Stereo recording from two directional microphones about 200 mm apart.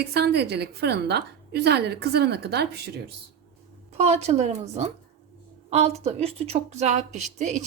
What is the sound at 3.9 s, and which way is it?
Speech, 35° right (ahead or behind).